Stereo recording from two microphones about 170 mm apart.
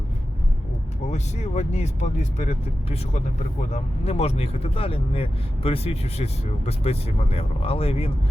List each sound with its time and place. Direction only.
1.1 s speech: 40° left (ahead or behind)